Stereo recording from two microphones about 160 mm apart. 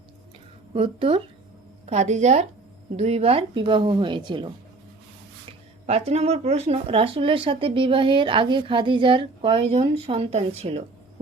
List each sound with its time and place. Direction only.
0.7 s speech: 35° right (ahead or behind)
5.8 s speech: 40° right (ahead or behind)